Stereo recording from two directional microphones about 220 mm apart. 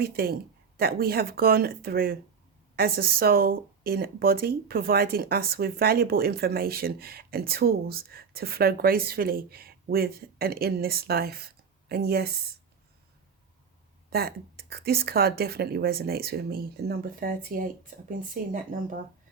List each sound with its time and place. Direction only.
0.0 s speech: 45° right (ahead or behind)
14.1 s speech: 45° right (ahead or behind)